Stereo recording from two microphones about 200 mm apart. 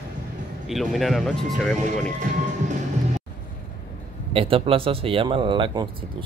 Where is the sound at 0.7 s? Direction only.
Centre (ahead or behind).